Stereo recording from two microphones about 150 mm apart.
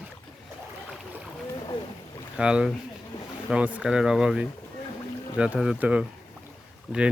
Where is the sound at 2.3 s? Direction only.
5° right (ahead or behind).